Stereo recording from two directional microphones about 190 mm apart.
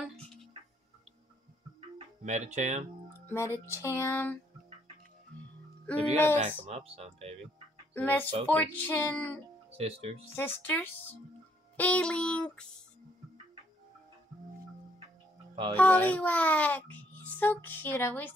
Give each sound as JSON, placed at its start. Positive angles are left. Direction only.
{"t": 0.0, "sound": "music", "side_deg": 0}
{"t": 2.2, "sound": "speech", "side_deg": -40}
{"t": 3.3, "sound": "a child's voice", "side_deg": 15}
{"t": 5.9, "sound": "a child's voice", "side_deg": 10}
{"t": 6.4, "sound": "speech", "side_deg": -35}
{"t": 7.9, "sound": "a child's voice", "side_deg": 10}
{"t": 9.7, "sound": "speech", "side_deg": -30}
{"t": 10.3, "sound": "a child's voice", "side_deg": 10}
{"t": 11.7, "sound": "music", "side_deg": 5}
{"t": 15.7, "sound": "a child's voice", "side_deg": 10}